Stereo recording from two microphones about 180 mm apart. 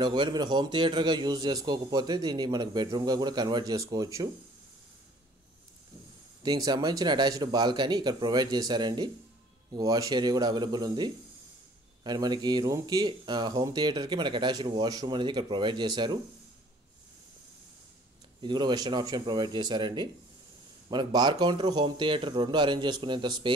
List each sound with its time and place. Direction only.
0.0 s a man's voice: 25° right (ahead or behind)
6.4 s a man's voice: 20° right (ahead or behind)
18.4 s a man's voice: 25° right (ahead or behind)